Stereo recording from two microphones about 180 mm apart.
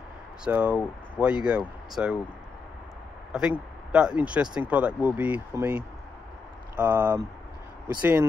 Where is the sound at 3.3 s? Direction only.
5° right (ahead or behind).